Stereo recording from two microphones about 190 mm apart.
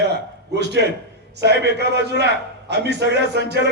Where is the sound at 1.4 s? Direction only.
60° right (ahead or behind).